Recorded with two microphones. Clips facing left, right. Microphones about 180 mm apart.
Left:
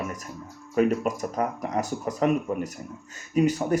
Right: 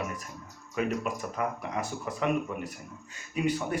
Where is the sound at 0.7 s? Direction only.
40° left (ahead or behind).